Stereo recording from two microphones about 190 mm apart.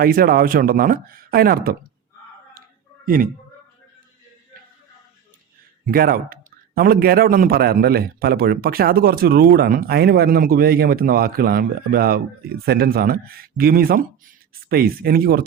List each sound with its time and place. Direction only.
0.0 s a man's voice: 50° right (ahead or behind)
5.8 s a man's voice: 50° right (ahead or behind)